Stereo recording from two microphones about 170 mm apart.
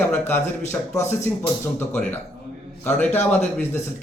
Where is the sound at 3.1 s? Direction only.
40° left (ahead or behind).